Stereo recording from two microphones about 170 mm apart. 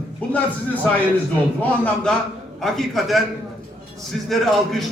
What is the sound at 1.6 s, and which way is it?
A man's voice, 5° left (ahead or behind).